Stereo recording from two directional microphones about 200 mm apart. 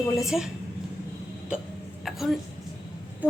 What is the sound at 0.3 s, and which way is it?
Speech, centre (ahead or behind).